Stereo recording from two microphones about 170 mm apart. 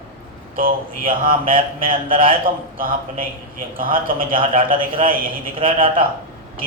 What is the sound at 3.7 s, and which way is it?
A man's voice, 55° right (ahead or behind).